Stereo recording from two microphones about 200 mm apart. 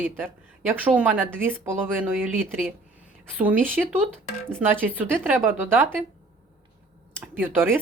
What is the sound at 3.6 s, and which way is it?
A woman's voice, 10° right (ahead or behind).